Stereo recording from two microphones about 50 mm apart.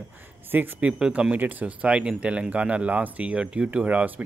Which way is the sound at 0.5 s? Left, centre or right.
Right.